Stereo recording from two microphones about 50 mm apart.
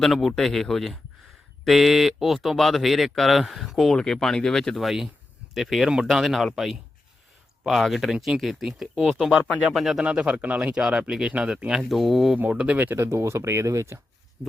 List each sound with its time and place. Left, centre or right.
0.0 s speech: centre
3.9 s speech: centre
4.8 s speech: centre
10.0 s a man's voice: centre
10.3 s speech: right
10.6 s speech: centre
12.5 s a man's voice: right
12.7 s speech: right
13.0 s speech: right